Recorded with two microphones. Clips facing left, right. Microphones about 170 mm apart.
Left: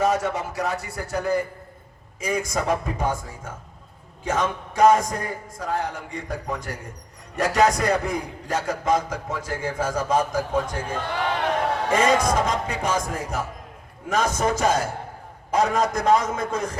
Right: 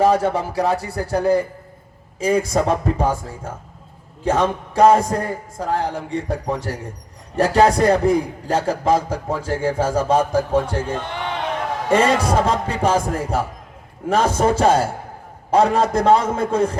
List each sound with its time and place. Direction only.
0.0 s a man's voice: 30° right (ahead or behind)